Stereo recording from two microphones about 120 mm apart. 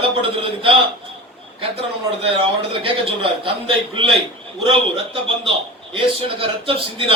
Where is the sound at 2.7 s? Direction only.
50° right (ahead or behind).